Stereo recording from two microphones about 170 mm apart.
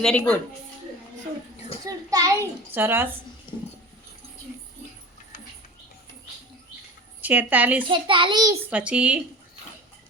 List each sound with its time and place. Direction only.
0.0 s a woman's voice: 5° left (ahead or behind)
1.8 s a sound: 20° right (ahead or behind)
3.5 s a sound: 30° left (ahead or behind)
7.2 s a woman's voice: 10° right (ahead or behind)
7.9 s a child's voice: 30° right (ahead or behind)
8.7 s a woman's voice: 5° right (ahead or behind)